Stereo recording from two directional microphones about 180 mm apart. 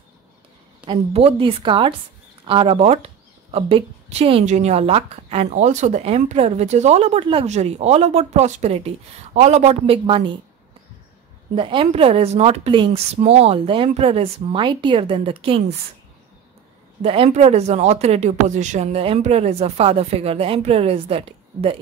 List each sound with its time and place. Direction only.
0.8 s a woman's voice: 30° right (ahead or behind)
11.5 s a woman's voice: 30° right (ahead or behind)
17.0 s a woman's voice: 35° right (ahead or behind)